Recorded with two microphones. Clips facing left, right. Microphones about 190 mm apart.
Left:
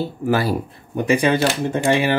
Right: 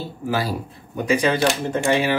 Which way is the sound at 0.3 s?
60° left (ahead or behind).